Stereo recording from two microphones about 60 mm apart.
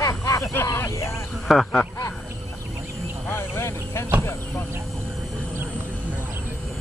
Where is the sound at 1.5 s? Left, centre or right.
Centre.